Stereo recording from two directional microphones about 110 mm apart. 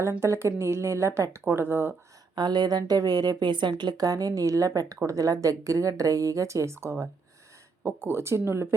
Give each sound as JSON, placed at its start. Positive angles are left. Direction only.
{"t": 0.0, "sound": "a woman's voice", "side_deg": -25}
{"t": 2.3, "sound": "a woman's voice", "side_deg": -40}